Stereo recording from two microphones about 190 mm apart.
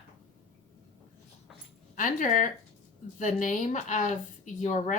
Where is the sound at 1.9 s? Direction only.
45° left (ahead or behind).